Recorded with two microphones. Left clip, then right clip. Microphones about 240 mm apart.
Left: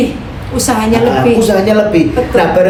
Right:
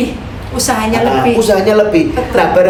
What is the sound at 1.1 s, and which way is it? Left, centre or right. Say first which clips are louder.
A woman's voice: left 1 dB; centre.